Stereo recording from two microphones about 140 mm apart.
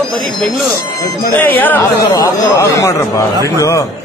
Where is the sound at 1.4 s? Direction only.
15° left (ahead or behind).